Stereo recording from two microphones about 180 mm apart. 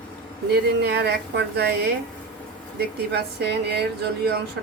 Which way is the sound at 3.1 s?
65° right (ahead or behind).